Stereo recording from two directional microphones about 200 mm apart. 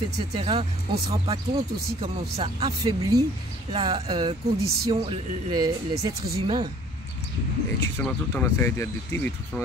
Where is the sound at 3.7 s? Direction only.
30° right (ahead or behind).